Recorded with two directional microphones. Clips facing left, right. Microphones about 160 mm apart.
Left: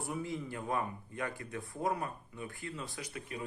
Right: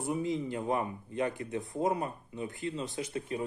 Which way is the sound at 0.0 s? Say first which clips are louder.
Right 6 dB; 20° right (ahead or behind).